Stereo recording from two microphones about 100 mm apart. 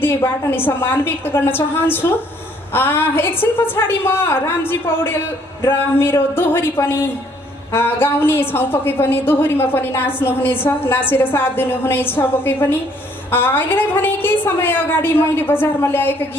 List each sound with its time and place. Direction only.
0.0 s a woman's voice: 25° left (ahead or behind)